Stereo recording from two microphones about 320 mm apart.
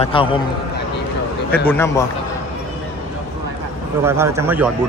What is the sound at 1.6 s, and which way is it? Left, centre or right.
Speech, centre.